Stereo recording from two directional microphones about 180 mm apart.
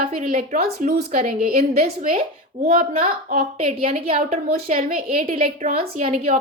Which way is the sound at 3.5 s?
35° right (ahead or behind).